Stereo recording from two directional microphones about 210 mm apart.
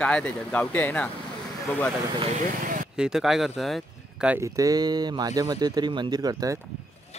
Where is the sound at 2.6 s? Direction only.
40° right (ahead or behind).